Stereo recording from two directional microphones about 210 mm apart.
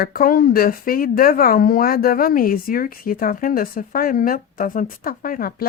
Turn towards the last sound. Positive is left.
turn(degrees=45)  # may be behind; listen again after turning